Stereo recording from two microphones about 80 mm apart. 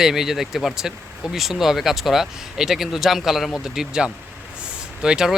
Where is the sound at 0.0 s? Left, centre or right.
Centre.